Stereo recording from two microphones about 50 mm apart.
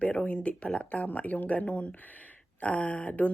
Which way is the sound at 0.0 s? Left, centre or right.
Left.